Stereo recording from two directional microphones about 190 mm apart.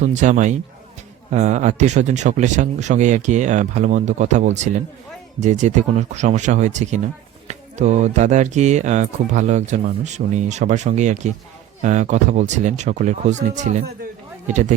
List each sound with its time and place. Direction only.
0.0 s speech: 40° right (ahead or behind)